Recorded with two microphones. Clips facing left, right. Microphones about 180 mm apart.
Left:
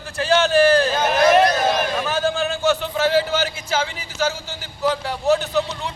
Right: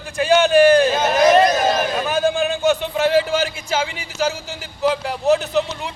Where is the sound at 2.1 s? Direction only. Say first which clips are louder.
Right 3 dB; 15° right (ahead or behind).